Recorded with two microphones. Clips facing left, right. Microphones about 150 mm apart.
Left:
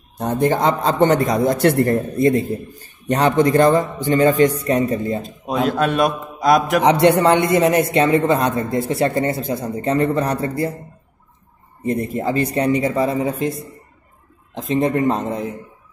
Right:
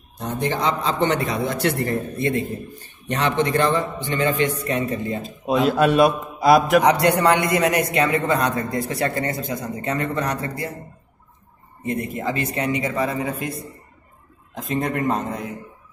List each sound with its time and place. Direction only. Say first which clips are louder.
0.2 s a man's voice: left 6 dB; 50° left (ahead or behind)
5.8 s a man's voice: right 2 dB; 5° right (ahead or behind)
6.8 s a man's voice: left 4 dB; 25° left (ahead or behind)
11.8 s a man's voice: left 4 dB; 35° left (ahead or behind)
14.8 s a man's voice: left 6 dB; 25° left (ahead or behind)